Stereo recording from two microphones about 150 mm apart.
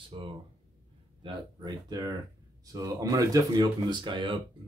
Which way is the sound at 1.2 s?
25° right (ahead or behind).